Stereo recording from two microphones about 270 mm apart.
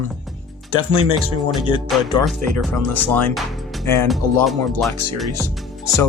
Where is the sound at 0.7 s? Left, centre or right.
Right.